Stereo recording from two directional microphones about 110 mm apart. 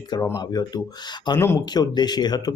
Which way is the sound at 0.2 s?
30° left (ahead or behind).